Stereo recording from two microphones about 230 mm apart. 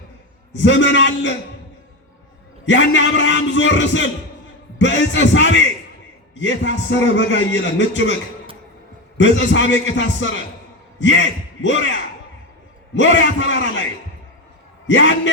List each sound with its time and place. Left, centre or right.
0.5 s a man's voice: left
2.6 s a man's voice: left
9.1 s a man's voice: left
14.8 s a man's voice: left